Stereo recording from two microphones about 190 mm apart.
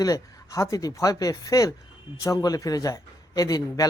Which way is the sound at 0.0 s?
20° left (ahead or behind).